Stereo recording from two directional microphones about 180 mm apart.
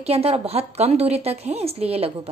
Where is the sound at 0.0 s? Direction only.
35° right (ahead or behind).